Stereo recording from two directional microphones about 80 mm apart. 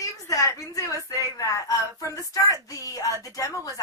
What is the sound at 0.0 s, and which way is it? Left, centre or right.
Speech, left.